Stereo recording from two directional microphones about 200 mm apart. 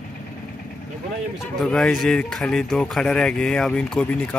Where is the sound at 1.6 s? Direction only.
5° left (ahead or behind).